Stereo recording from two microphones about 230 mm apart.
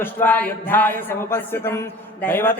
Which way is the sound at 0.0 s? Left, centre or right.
Centre.